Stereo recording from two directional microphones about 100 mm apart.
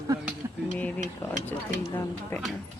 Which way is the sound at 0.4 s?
30° right (ahead or behind).